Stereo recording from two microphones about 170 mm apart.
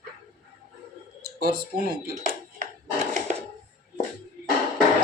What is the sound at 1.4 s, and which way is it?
Speech, 65° right (ahead or behind).